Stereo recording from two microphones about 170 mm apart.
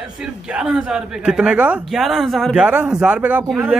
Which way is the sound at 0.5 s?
5° right (ahead or behind).